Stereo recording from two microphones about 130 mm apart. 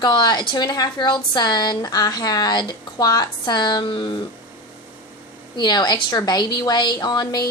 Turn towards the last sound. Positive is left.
turn(degrees=35)  # may be behind; listen again after turning